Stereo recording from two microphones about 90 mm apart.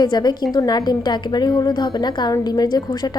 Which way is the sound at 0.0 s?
50° left (ahead or behind).